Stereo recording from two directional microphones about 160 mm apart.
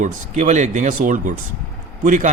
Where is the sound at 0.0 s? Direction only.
50° right (ahead or behind).